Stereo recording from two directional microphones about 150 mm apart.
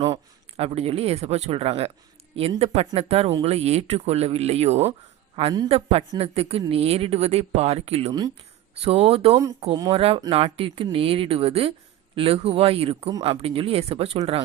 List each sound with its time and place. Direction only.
0.0 s speech: 40° right (ahead or behind)